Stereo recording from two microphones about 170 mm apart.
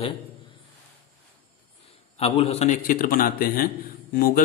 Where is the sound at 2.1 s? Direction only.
35° left (ahead or behind).